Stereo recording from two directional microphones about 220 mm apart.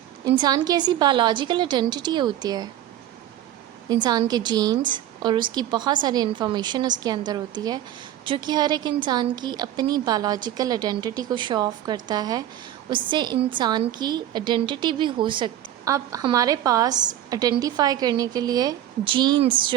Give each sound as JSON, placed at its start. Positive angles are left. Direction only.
{"t": 0.3, "sound": "a woman's voice", "side_deg": -20}
{"t": 3.8, "sound": "a woman's voice", "side_deg": -20}